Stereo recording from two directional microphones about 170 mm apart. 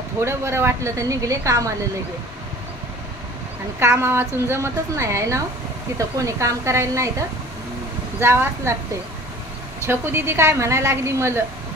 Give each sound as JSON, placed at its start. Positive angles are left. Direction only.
{"t": 0.2, "sound": "a woman's voice", "side_deg": -15}
{"t": 3.8, "sound": "a woman's voice", "side_deg": -15}
{"t": 9.8, "sound": "a woman's voice", "side_deg": -15}